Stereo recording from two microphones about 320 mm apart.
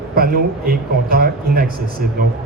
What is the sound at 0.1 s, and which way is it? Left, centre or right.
A man's voice, right.